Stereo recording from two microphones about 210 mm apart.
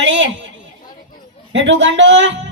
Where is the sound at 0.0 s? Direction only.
60° right (ahead or behind).